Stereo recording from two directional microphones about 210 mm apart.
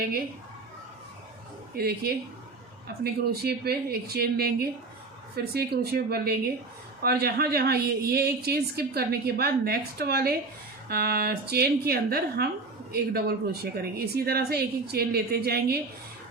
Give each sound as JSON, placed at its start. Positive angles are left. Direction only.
{"t": 1.7, "sound": "a woman's voice", "side_deg": -45}